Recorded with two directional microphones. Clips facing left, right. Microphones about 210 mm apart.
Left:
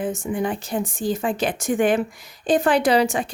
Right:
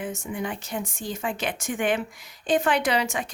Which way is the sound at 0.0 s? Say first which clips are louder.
Left 7 dB; 30° left (ahead or behind).